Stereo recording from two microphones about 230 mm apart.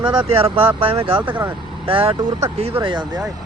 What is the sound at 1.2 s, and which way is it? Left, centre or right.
Speech, centre.